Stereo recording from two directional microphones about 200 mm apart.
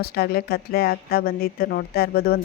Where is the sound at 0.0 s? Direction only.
50° left (ahead or behind).